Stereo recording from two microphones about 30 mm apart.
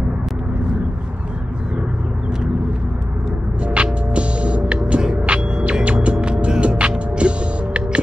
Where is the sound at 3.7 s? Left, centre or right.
Right.